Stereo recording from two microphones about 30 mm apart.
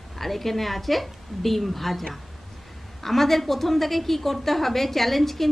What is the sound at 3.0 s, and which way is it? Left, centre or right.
A woman's voice, centre.